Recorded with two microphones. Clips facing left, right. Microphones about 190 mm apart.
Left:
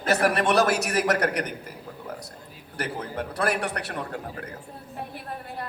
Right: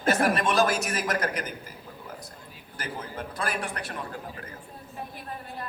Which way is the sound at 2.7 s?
65° left (ahead or behind).